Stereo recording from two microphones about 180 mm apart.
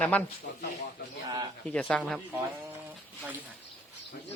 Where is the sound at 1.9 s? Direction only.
5° left (ahead or behind).